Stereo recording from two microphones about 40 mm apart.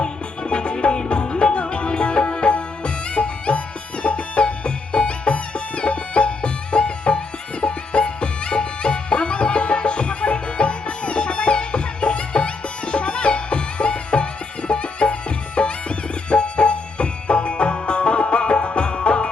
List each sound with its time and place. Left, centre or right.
0.0 s music: left